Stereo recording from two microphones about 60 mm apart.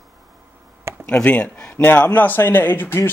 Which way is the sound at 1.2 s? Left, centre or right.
Centre.